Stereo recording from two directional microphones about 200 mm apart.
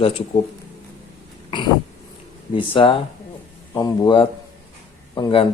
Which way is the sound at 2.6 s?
25° left (ahead or behind).